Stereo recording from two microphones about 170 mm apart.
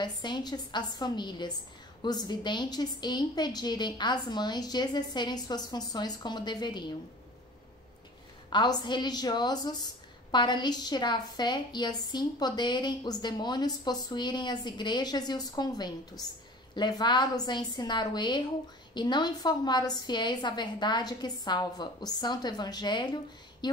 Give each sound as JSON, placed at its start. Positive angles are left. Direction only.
{"t": 0.0, "sound": "a woman's voice", "side_deg": 25}
{"t": 8.5, "sound": "a woman's voice", "side_deg": 25}